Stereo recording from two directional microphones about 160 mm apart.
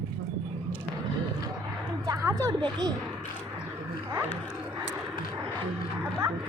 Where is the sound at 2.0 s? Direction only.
20° right (ahead or behind).